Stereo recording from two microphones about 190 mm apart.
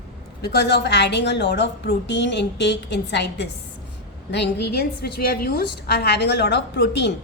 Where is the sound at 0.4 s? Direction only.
60° left (ahead or behind).